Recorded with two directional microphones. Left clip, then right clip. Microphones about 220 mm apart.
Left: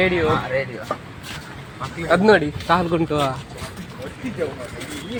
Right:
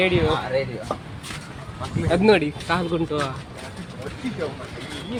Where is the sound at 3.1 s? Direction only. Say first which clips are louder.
Left 4 dB; 30° left (ahead or behind).